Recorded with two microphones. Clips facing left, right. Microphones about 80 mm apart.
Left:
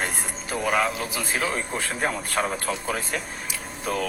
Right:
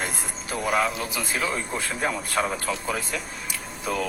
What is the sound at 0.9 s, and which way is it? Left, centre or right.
Speech, left.